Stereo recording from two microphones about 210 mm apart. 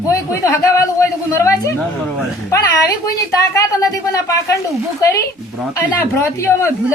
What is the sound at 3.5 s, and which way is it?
Speech, 15° left (ahead or behind).